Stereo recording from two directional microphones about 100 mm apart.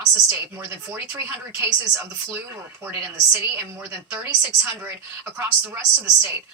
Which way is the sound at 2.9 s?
25° right (ahead or behind).